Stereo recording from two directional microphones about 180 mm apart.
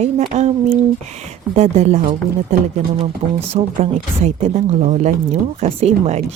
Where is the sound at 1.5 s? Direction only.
35° right (ahead or behind).